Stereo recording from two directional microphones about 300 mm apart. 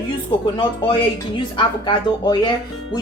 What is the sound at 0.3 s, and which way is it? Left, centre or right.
Speech, centre.